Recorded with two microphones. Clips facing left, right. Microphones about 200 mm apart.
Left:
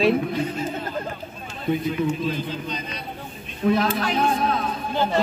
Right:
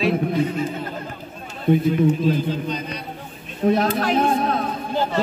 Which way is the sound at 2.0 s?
45° right (ahead or behind).